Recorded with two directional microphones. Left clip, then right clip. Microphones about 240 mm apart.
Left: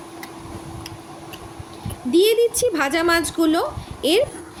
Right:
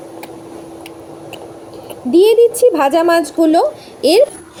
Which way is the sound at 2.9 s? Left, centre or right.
Left.